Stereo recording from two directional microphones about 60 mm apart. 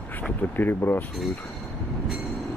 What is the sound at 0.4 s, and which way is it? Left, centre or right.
Speech, left.